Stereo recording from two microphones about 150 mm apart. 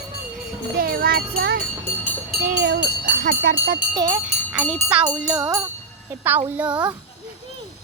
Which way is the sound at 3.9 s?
25° right (ahead or behind).